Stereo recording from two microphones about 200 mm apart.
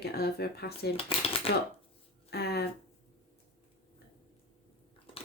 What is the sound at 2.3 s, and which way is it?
Speech, 55° left (ahead or behind).